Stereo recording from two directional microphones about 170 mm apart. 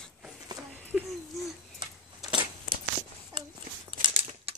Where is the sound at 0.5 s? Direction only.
25° right (ahead or behind).